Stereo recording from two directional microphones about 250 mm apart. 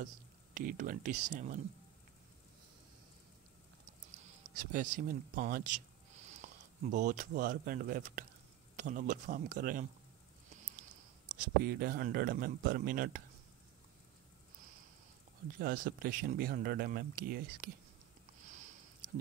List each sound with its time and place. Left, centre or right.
0.6 s speech: right
4.6 s speech: right
15.6 s speech: right